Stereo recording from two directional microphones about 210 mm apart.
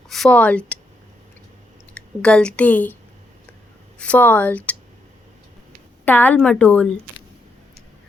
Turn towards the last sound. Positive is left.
turn(degrees=5)  # may be behind; listen again after turning